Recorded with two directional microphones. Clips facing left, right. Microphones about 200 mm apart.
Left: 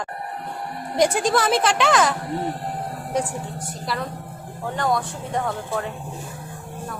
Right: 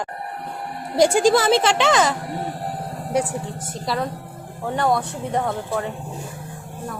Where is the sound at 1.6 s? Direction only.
25° right (ahead or behind).